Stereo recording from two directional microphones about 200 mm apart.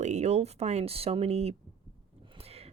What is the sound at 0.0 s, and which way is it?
Speech, 35° right (ahead or behind).